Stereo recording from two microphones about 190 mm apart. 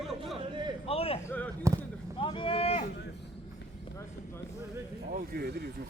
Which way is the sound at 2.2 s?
25° left (ahead or behind).